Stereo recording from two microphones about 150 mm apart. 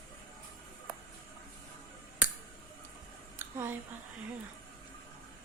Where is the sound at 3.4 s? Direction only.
15° right (ahead or behind).